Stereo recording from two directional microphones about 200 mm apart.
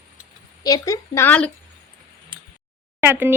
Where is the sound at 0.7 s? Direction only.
20° left (ahead or behind).